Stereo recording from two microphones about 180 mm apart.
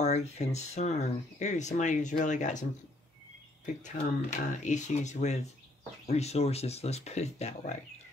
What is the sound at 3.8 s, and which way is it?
Speech, 40° left (ahead or behind).